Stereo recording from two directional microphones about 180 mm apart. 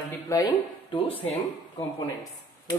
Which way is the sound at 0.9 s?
30° left (ahead or behind).